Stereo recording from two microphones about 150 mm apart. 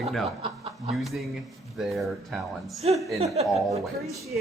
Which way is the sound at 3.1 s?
45° right (ahead or behind).